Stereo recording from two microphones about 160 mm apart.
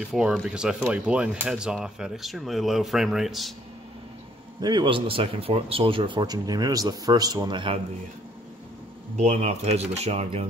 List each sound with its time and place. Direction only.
0.0 s speech: 5° right (ahead or behind)
4.6 s speech: 25° right (ahead or behind)
9.1 s speech: 45° right (ahead or behind)